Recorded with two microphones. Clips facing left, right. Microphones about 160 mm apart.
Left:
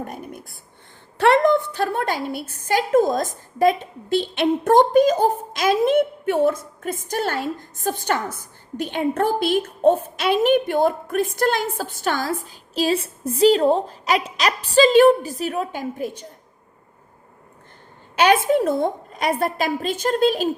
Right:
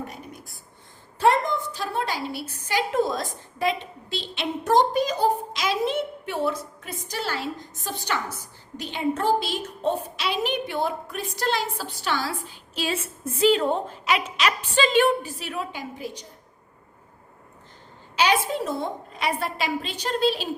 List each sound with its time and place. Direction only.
1.2 s a woman's voice: 70° left (ahead or behind); by 16.2 s 50° left (ahead or behind)
18.2 s a woman's voice: 55° left (ahead or behind)